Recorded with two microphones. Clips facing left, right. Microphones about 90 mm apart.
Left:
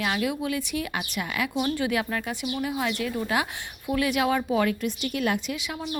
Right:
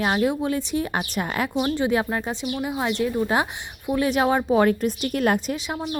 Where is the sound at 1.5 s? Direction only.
25° right (ahead or behind).